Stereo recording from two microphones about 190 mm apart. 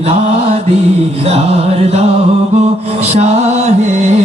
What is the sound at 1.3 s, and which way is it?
Music, 35° right (ahead or behind).